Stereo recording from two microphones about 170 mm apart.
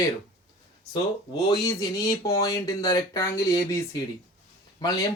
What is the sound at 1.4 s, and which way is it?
Speech, 25° left (ahead or behind).